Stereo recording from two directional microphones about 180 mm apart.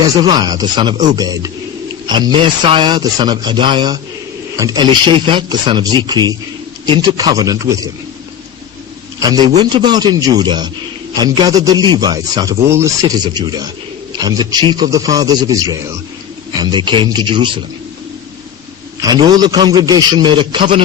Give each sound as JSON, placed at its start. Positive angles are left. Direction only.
{"t": 0.2, "sound": "speech", "side_deg": -25}
{"t": 9.2, "sound": "speech", "side_deg": -20}
{"t": 19.0, "sound": "speech", "side_deg": -20}